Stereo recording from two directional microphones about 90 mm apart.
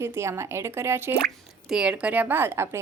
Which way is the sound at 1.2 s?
5° right (ahead or behind).